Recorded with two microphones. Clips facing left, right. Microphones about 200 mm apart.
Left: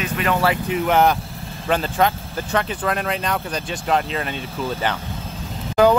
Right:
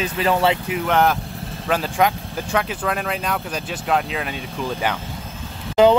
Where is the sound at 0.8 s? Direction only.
5° left (ahead or behind).